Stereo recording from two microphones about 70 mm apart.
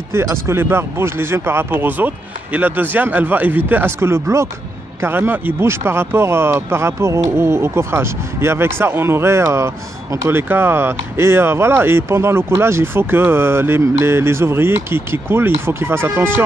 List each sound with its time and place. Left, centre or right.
0.1 s speech: right
4.0 s speech: right